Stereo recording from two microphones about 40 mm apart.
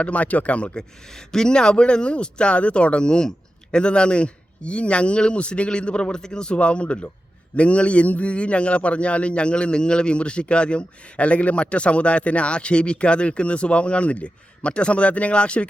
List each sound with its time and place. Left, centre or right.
0.0 s speech: left
1.1 s a man's voice: centre